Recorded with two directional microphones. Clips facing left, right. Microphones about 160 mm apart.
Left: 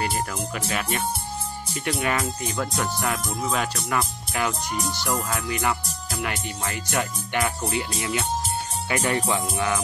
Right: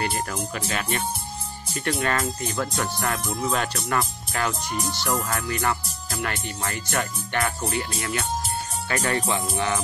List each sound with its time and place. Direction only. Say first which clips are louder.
0.0 s speech: even; 5° left (ahead or behind)
9.4 s speech: even; 5° left (ahead or behind)